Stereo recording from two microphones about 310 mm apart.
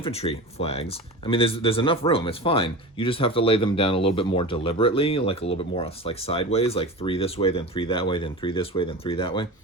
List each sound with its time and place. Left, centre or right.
0.0 s speech: centre